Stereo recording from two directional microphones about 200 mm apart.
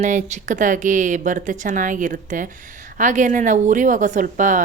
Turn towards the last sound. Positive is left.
turn(degrees=-40)  # may be behind; listen again after turning